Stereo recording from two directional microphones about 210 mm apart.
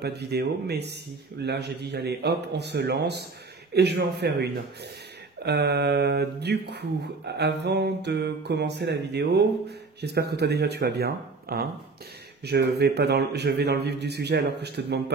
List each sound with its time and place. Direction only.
0.0 s mantra: 50° right (ahead or behind)